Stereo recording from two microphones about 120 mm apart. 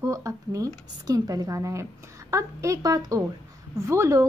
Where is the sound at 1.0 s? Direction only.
30° right (ahead or behind).